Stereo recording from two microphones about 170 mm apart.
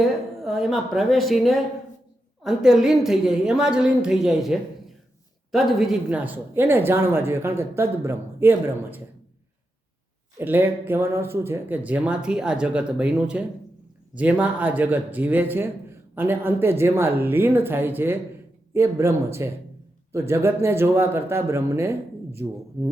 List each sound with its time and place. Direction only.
0.3 s a woman's voice: centre (ahead or behind)
10.3 s speech: 10° right (ahead or behind)